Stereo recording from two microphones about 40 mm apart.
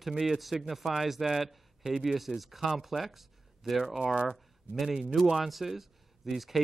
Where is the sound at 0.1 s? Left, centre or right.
Centre.